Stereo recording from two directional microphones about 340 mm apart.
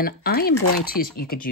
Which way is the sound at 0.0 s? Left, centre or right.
Left.